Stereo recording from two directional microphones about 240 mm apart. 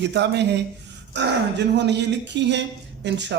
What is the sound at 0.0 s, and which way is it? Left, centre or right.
Speech, right.